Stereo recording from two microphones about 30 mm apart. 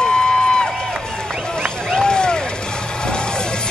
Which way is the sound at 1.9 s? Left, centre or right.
Left.